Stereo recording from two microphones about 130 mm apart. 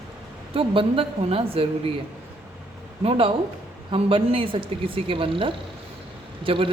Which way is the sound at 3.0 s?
45° right (ahead or behind).